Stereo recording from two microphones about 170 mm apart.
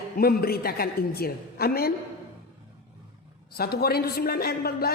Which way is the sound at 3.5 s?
65° left (ahead or behind).